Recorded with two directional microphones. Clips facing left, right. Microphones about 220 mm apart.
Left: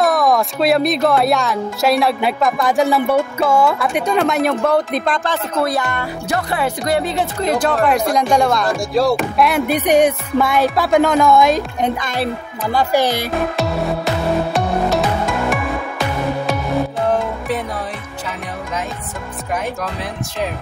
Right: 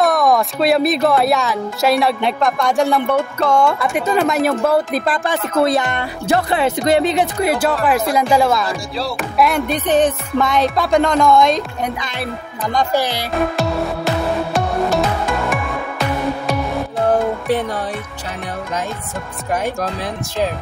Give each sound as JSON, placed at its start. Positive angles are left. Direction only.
{"t": 0.0, "sound": "speech", "side_deg": 0}
{"t": 5.7, "sound": "speech", "side_deg": -20}
{"t": 12.6, "sound": "speech", "side_deg": 5}
{"t": 14.5, "sound": "music", "side_deg": 0}